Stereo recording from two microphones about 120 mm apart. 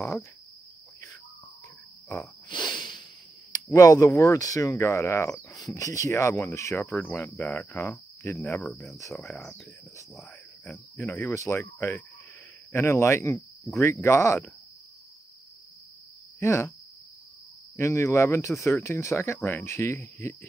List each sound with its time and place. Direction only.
2.4 s a sound: 40° left (ahead or behind)
3.7 s speech: 30° left (ahead or behind)
6.9 s cricket: 15° left (ahead or behind)
11.0 s speech: 20° left (ahead or behind)
16.3 s speech: 20° left (ahead or behind)
17.7 s speech: 25° left (ahead or behind)